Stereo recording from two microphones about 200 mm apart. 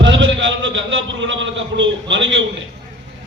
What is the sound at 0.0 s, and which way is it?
A man's voice, 70° right (ahead or behind).